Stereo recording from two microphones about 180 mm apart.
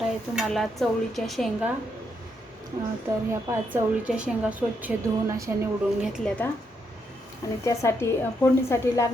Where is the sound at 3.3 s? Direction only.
10° right (ahead or behind).